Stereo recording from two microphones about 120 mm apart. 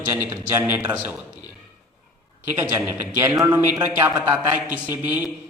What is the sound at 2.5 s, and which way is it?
A man's voice, 15° right (ahead or behind).